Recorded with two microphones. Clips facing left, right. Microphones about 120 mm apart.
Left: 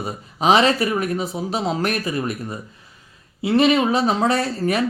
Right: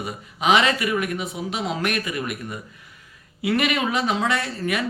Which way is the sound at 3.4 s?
30° left (ahead or behind).